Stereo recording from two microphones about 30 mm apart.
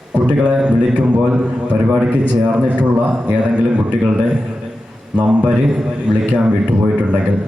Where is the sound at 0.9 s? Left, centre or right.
Right.